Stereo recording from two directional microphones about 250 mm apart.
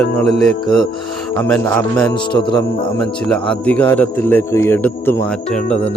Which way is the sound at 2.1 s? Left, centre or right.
Centre.